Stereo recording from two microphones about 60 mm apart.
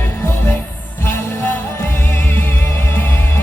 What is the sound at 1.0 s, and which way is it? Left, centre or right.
Music, left.